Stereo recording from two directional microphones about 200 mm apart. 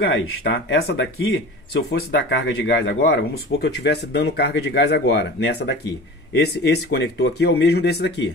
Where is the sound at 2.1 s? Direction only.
65° left (ahead or behind).